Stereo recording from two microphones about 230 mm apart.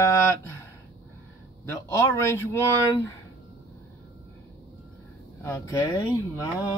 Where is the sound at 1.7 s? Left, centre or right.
Centre.